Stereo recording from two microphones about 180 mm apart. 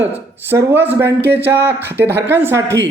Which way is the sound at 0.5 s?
10° right (ahead or behind).